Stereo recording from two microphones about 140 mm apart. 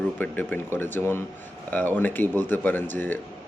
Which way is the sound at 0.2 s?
10° left (ahead or behind).